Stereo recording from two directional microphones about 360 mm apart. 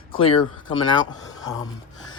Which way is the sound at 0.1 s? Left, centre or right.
Centre.